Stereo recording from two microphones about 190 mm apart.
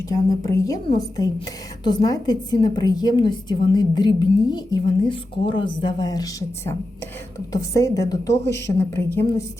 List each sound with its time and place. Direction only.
0.1 s a woman's voice: 20° left (ahead or behind)